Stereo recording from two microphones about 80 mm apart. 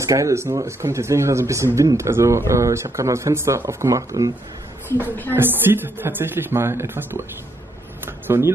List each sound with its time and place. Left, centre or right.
0.0 s speech: right
5.3 s speech: right
8.0 s a sound: right